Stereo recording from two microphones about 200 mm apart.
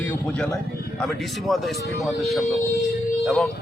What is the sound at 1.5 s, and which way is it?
Speech, centre (ahead or behind).